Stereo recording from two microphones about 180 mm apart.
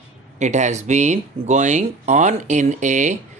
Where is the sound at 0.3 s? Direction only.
40° right (ahead or behind).